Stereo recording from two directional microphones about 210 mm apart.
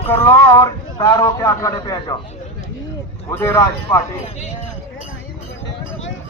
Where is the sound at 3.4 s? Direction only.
15° left (ahead or behind).